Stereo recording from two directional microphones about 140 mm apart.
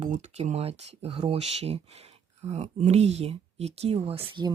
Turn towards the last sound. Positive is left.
turn(degrees=-40)  # may be behind; listen again after turning